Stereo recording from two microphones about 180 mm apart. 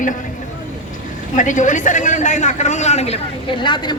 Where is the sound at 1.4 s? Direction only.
45° left (ahead or behind).